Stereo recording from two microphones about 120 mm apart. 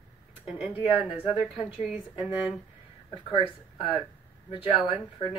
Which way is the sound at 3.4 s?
45° left (ahead or behind).